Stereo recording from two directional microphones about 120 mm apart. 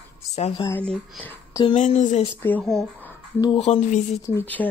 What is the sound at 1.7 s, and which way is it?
Speech, 85° left.